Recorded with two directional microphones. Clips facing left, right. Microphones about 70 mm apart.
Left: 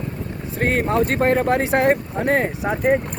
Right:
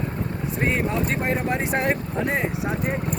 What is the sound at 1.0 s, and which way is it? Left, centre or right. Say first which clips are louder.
Speech: left 6 dB; left.